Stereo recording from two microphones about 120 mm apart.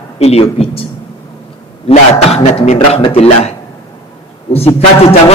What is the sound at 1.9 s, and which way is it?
A man's voice, 60° left (ahead or behind).